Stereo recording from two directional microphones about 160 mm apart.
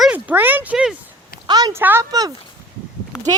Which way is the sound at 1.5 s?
25° right (ahead or behind).